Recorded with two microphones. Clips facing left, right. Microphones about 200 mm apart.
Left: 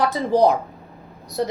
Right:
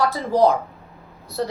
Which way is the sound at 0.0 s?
20° left (ahead or behind).